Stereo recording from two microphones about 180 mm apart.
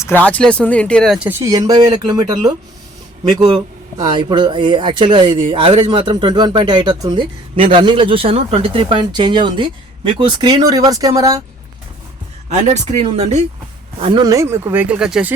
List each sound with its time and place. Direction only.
0.0 s speech: 10° left (ahead or behind)
1.3 s speech: 15° right (ahead or behind)
12.5 s speech: 40° right (ahead or behind)
14.0 s speech: 25° right (ahead or behind); by 15.3 s 5° right (ahead or behind)